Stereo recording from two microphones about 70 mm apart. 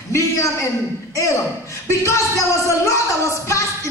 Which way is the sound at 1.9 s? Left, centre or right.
Left.